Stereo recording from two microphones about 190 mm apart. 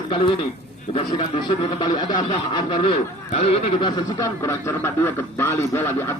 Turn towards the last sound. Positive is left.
turn(degrees=15)  # may be behind; listen again after turning